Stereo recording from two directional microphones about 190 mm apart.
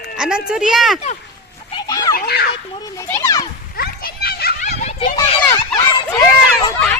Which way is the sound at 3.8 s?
55° left (ahead or behind).